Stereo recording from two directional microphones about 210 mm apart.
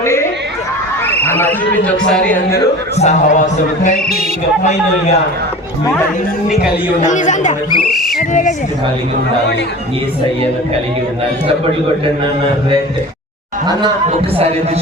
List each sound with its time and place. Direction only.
0.0 s a sound: 15° left (ahead or behind)
1.0 s speech: 10° left (ahead or behind)
3.0 s speech: 35° left (ahead or behind)
7.0 s speech: 35° left (ahead or behind)